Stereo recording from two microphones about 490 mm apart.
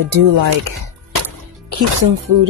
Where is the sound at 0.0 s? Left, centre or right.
Right.